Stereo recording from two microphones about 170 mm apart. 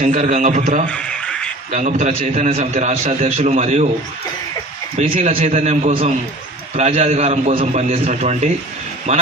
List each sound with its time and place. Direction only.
0.0 s a man's voice: 45° right (ahead or behind)
0.9 s a sound: 5° left (ahead or behind)
1.7 s a man's voice: 45° right (ahead or behind)
5.0 s a man's voice: 40° right (ahead or behind)